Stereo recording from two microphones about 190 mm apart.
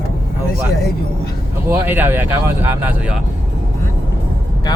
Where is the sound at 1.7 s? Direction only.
10° right (ahead or behind).